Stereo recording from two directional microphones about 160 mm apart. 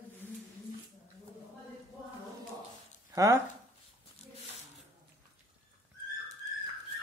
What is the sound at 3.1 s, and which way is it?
Speech, 20° right (ahead or behind).